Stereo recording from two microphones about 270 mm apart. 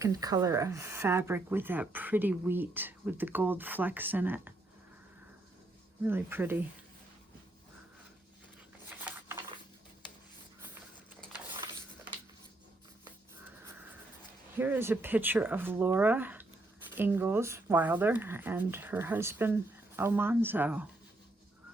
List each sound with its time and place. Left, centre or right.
0.0 s speech: centre
6.0 s speech: centre
8.9 s a sound: centre
14.5 s speech: centre